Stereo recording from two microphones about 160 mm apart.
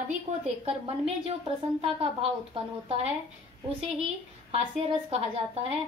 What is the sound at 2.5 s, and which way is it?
A woman's voice, 40° right (ahead or behind).